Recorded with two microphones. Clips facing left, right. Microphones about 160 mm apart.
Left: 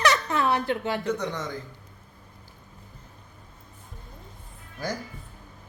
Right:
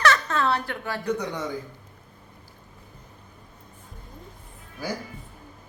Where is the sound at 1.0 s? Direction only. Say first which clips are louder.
Right 1 dB; 10° right (ahead or behind).